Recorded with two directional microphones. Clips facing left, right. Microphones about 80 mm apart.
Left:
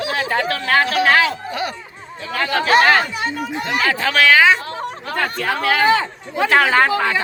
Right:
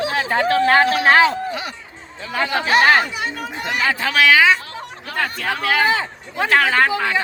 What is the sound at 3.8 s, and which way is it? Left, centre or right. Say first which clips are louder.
Speech: even; centre.